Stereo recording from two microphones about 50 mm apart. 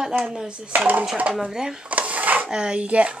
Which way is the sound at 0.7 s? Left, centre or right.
Right.